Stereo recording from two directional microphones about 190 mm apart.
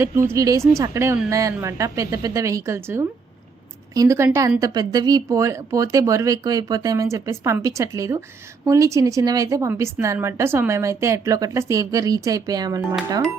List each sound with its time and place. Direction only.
0.3 s a woman's voice: 15° right (ahead or behind)